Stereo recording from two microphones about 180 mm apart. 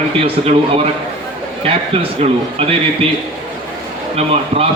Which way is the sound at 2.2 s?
35° right (ahead or behind).